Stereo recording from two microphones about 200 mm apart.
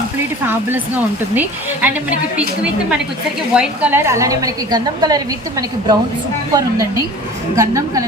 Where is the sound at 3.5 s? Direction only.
5° right (ahead or behind).